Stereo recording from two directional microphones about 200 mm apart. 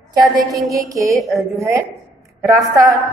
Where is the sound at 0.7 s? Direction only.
15° right (ahead or behind).